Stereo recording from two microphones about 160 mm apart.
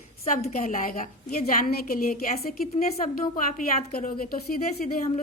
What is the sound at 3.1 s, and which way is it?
A woman's voice, 60° left (ahead or behind).